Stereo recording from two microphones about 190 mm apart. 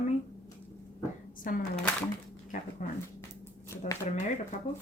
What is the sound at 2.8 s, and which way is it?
Speech, 45° left (ahead or behind).